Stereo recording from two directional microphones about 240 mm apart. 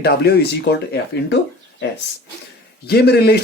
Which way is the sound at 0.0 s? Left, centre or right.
Left.